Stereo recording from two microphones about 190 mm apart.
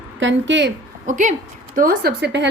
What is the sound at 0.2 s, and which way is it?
Speech, 75° right (ahead or behind).